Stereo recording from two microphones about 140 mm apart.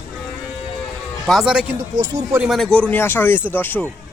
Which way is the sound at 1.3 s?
5° right (ahead or behind).